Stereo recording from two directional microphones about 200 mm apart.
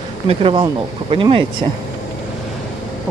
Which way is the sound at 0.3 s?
25° right (ahead or behind).